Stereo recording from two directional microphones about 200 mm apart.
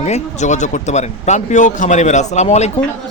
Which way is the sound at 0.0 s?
35° left (ahead or behind).